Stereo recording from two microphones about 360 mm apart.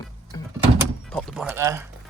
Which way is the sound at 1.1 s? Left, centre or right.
Centre.